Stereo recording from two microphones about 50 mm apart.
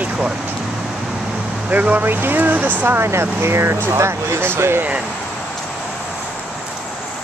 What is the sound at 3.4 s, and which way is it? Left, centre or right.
Speech, right.